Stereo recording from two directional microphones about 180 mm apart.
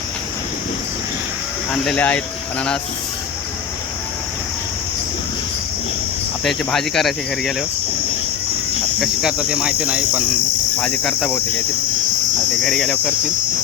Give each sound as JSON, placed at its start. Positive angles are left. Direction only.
{"t": 1.7, "sound": "cricket", "side_deg": 5}
{"t": 6.4, "sound": "cricket", "side_deg": 0}
{"t": 9.0, "sound": "cricket", "side_deg": -5}
{"t": 12.6, "sound": "cricket", "side_deg": 0}